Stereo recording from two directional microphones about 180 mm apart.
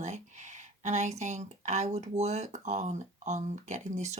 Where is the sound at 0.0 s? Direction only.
40° right (ahead or behind).